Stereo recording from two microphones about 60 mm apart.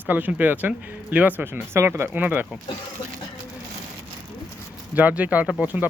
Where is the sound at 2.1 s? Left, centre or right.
Right.